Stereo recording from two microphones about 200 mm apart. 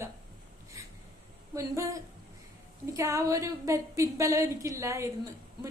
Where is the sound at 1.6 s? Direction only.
15° right (ahead or behind).